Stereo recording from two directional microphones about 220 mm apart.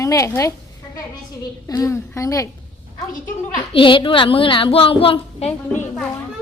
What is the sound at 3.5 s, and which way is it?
A woman's voice, 25° left (ahead or behind).